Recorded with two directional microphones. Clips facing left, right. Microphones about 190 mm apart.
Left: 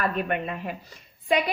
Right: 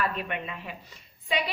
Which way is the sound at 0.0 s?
50° left (ahead or behind).